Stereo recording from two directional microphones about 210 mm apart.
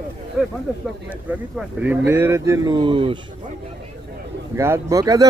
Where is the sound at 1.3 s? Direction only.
5° right (ahead or behind); by 3.2 s 25° right (ahead or behind).